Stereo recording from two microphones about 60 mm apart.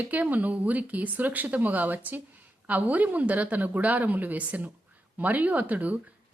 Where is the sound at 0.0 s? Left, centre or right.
Right.